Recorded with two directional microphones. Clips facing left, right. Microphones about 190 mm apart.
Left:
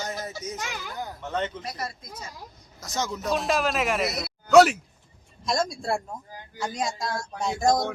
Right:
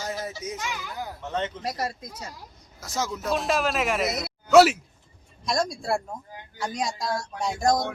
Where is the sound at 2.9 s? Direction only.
5° right (ahead or behind).